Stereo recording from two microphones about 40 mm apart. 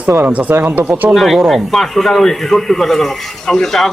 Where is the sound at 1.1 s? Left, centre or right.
Centre.